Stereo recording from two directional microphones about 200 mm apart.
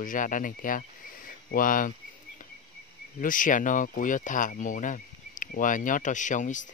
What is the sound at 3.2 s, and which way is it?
Speech, 40° left (ahead or behind).